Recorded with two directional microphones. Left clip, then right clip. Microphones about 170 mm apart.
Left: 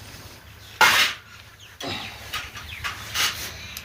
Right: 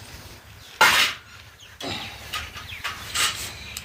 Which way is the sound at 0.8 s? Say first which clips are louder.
Even; 15° left (ahead or behind).